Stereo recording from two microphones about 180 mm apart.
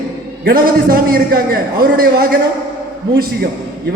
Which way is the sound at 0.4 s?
55° right (ahead or behind).